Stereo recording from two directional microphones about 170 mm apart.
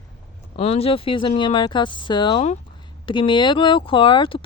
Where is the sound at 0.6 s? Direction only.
35° left (ahead or behind).